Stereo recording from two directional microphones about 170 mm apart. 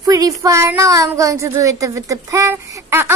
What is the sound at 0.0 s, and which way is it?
A woman's voice, 20° right (ahead or behind).